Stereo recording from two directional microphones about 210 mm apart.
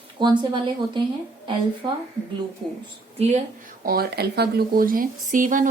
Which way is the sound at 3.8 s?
45° right (ahead or behind).